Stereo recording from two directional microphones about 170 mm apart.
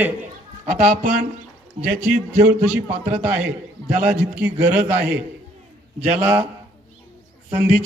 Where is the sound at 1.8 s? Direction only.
35° right (ahead or behind).